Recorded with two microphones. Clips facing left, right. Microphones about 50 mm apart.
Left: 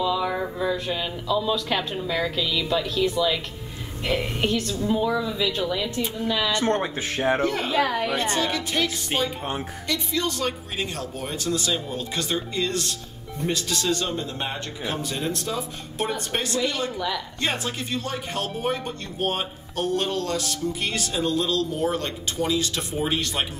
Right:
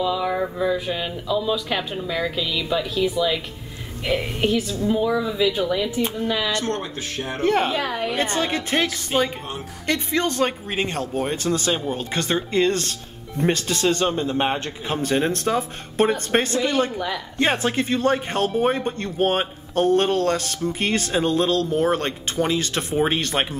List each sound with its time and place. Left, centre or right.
0.0 s a woman's voice: centre
6.5 s speech: left
7.4 s speech: right
7.7 s speech: centre
8.2 s speech: right